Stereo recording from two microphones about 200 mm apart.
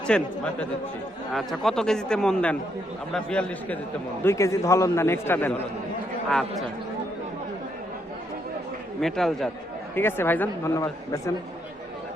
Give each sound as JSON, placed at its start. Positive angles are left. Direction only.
{"t": 0.1, "sound": "speech", "side_deg": 5}
{"t": 9.0, "sound": "speech", "side_deg": 0}